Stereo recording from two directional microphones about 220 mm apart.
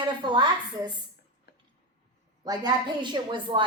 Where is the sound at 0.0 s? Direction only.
20° right (ahead or behind).